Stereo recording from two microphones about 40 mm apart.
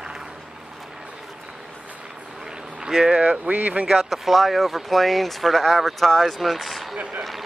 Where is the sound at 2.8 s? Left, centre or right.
Centre.